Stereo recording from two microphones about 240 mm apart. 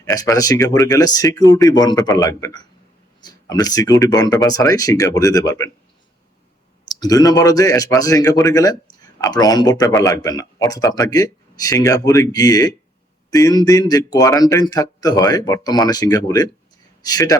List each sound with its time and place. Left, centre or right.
0.0 s speech: centre
6.8 s a man's voice: centre